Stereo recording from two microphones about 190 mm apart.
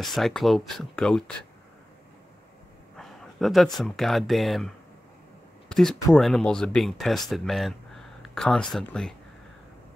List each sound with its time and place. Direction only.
0.0 s speech: centre (ahead or behind)
3.0 s speech: centre (ahead or behind)